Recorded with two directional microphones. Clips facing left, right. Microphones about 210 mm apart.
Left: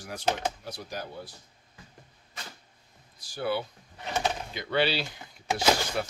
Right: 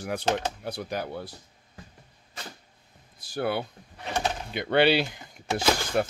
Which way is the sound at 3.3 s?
55° right (ahead or behind).